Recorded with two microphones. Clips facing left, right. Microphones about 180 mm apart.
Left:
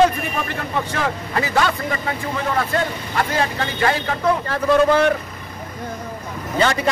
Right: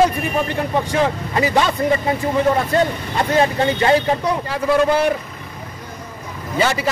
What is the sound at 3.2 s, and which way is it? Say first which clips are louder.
Speech: right 5 dB; 25° right (ahead or behind).